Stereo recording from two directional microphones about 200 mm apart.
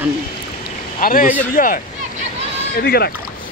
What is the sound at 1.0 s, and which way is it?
Speech, 45° left (ahead or behind).